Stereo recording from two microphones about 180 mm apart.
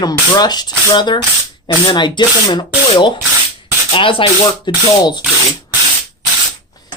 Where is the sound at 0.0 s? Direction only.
20° left (ahead or behind).